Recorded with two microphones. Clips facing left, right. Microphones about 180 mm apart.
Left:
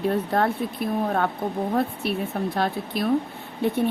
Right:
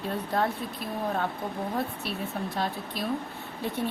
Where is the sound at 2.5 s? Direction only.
65° left (ahead or behind).